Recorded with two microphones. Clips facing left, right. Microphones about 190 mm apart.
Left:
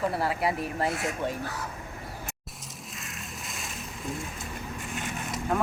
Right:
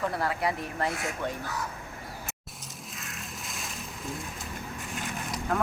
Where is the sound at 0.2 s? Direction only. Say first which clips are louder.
Left 2 dB; 30° left (ahead or behind).